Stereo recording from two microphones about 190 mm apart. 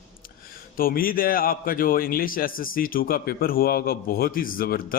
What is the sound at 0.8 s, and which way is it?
A man's voice, 50° left (ahead or behind).